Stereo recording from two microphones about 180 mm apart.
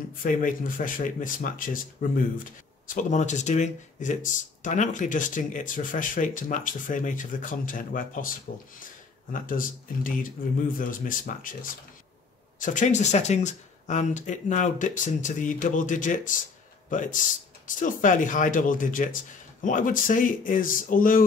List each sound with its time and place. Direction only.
0.2 s speech: 50° left (ahead or behind)
9.3 s speech: 50° left (ahead or behind)
17.6 s speech: 45° left (ahead or behind)